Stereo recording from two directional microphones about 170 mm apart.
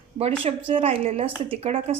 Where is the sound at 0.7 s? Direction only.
35° right (ahead or behind).